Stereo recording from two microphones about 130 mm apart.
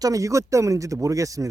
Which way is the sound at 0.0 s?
25° right (ahead or behind).